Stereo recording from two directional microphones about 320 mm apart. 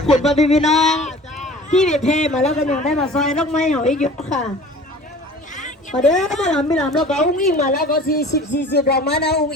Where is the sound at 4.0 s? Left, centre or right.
Left.